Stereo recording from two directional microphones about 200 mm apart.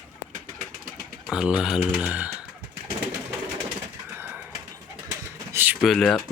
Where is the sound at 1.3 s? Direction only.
5° right (ahead or behind).